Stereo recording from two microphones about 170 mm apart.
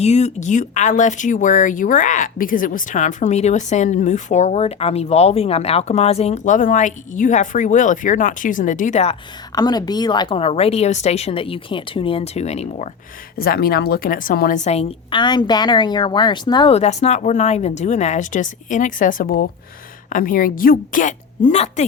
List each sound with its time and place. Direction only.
0.0 s speech: 40° left (ahead or behind)
9.6 s a woman's voice: 25° left (ahead or behind); by 12.9 s 40° left (ahead or behind)
13.3 s a woman's voice: 60° left (ahead or behind); by 16.7 s 25° left (ahead or behind)
16.7 s speech: 40° left (ahead or behind)